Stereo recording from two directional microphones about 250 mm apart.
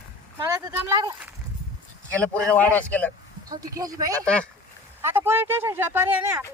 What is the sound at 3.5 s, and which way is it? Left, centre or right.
Speech, centre.